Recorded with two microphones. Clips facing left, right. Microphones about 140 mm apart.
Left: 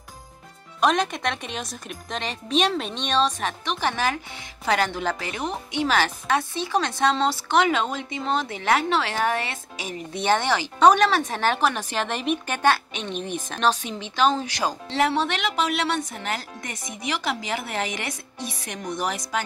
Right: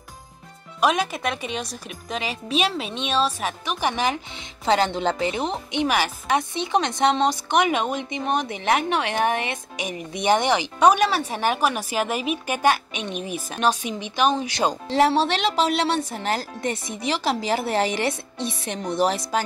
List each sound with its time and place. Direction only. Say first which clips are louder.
0.7 s speech: even; 5° right (ahead or behind)
14.5 s a woman's voice: right 4 dB; 25° right (ahead or behind)